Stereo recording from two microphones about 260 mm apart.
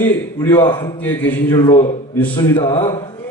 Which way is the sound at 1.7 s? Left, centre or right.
Left.